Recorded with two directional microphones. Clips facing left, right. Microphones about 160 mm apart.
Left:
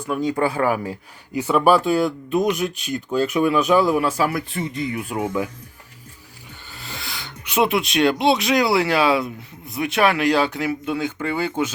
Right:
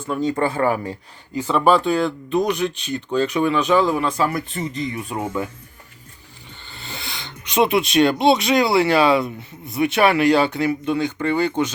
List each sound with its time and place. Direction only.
0.1 s speech: 5° left (ahead or behind)
2.4 s speech: 30° right (ahead or behind)
3.1 s speech: 5° left (ahead or behind)
6.7 s speech: 5° left (ahead or behind)